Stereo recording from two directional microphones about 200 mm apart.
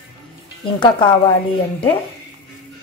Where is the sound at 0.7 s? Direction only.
25° left (ahead or behind).